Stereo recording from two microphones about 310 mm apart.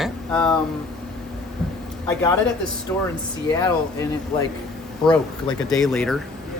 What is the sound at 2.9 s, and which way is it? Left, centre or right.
Speech, centre.